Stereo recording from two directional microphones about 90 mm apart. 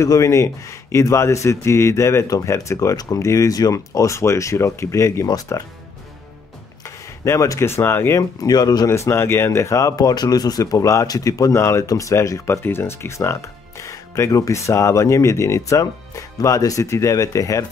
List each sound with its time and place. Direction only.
0.0 s speech: 35° left (ahead or behind)
6.8 s speech: 35° left (ahead or behind)
8.2 s speech: 45° left (ahead or behind)
8.9 s speech: 30° left (ahead or behind)